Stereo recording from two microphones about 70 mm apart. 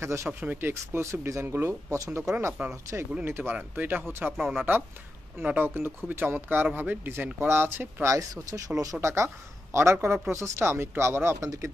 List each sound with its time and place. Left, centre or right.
0.0 s speech: right
0.3 s speech: right
3.3 s speech: right
8.0 s speech: right
9.0 s speech: right
11.4 s speech: right